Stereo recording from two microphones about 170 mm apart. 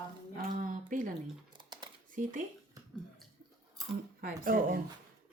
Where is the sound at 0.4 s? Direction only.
50° right (ahead or behind).